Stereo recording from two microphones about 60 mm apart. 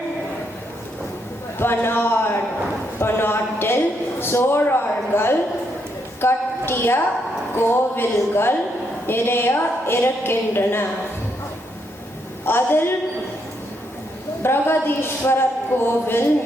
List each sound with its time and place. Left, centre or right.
1.5 s speech: left
3.0 s a sound: left
4.2 s speech: left
6.1 s a sound: left
7.5 s speech: left
12.5 s speech: left
14.4 s speech: left